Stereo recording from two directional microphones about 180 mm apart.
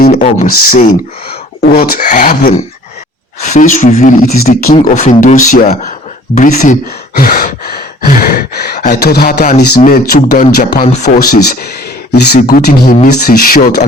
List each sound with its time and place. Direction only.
0.1 s speech: 45° left (ahead or behind)
1.6 s speech: 55° left (ahead or behind)
7.1 s a sound: 55° left (ahead or behind)
9.6 s speech: 55° left (ahead or behind)
12.1 s speech: 65° left (ahead or behind)
12.4 s speech: 55° left (ahead or behind)